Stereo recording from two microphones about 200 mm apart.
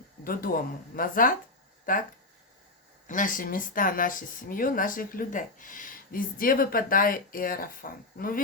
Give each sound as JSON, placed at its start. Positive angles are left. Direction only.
{"t": 0.3, "sound": "speech", "side_deg": 45}
{"t": 3.1, "sound": "speech", "side_deg": 40}